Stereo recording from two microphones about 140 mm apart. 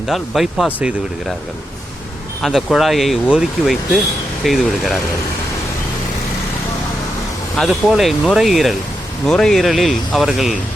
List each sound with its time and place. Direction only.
0.1 s speech: centre (ahead or behind)
2.4 s speech: centre (ahead or behind)
7.5 s speech: centre (ahead or behind)